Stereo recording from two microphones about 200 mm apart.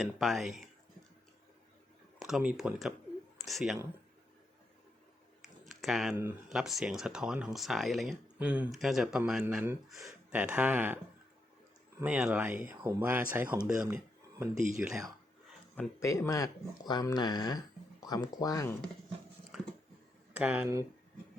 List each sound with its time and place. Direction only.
0.0 s speech: centre (ahead or behind)
2.1 s speech: centre (ahead or behind)
5.4 s a sound: centre (ahead or behind)
6.5 s speech: centre (ahead or behind)
15.7 s speech: 10° left (ahead or behind)
19.5 s a sound: centre (ahead or behind)
20.3 s speech: 10° right (ahead or behind)